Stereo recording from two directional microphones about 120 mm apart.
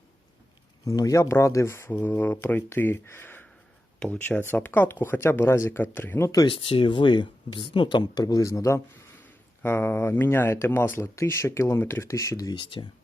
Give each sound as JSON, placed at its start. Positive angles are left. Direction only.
{"t": 0.9, "sound": "speech", "side_deg": 30}
{"t": 6.4, "sound": "speech", "side_deg": 50}